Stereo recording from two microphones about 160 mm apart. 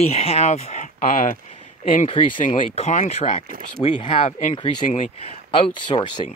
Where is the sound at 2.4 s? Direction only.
45° left (ahead or behind).